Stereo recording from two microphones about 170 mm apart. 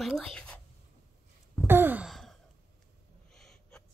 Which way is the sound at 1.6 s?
10° right (ahead or behind).